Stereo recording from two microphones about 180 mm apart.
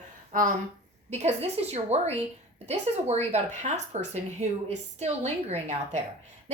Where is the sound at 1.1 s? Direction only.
40° right (ahead or behind).